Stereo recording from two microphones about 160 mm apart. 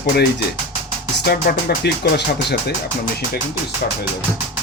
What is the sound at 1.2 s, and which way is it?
Speech, 90° left.